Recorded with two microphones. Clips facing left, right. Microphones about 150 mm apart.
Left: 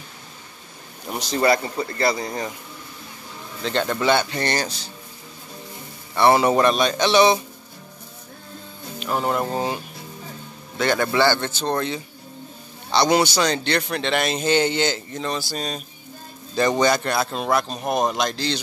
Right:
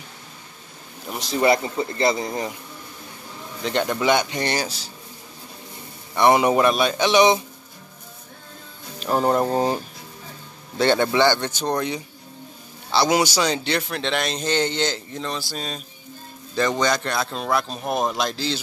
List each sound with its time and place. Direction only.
1.0 s a sound: centre (ahead or behind)
1.4 s a man's voice: 20° right (ahead or behind)
3.6 s speech: 15° right (ahead or behind)
6.1 s speech: 15° right (ahead or behind)
9.0 s speech: 35° right (ahead or behind)
10.8 s a man's voice: 30° right (ahead or behind)
11.1 s a man's voice: 15° right (ahead or behind); by 15.8 s centre (ahead or behind)
16.5 s a man's voice: 10° left (ahead or behind); by 18.6 s 5° right (ahead or behind)